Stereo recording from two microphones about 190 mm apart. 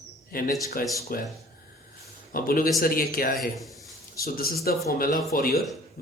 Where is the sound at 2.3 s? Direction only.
50° left (ahead or behind).